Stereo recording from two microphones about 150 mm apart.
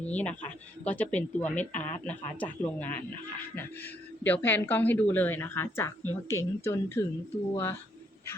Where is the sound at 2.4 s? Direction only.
10° left (ahead or behind).